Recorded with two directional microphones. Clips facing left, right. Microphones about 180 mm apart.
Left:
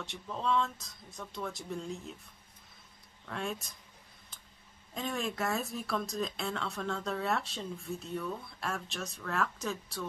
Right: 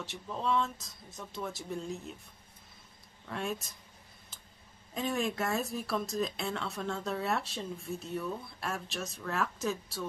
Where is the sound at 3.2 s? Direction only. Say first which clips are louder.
Right 1 dB; 5° right (ahead or behind).